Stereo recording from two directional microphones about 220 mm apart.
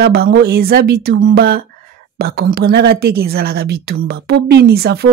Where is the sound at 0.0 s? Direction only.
50° right (ahead or behind).